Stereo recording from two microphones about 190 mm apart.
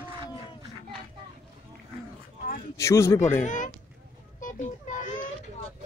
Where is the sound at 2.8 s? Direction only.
15° left (ahead or behind).